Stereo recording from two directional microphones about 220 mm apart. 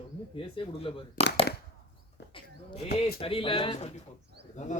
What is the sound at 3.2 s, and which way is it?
Speech, 25° left (ahead or behind).